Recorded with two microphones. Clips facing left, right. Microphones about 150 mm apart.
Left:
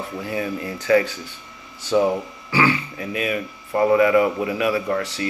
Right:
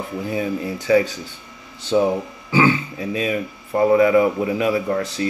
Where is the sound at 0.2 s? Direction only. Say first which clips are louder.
Right 3 dB; 15° right (ahead or behind).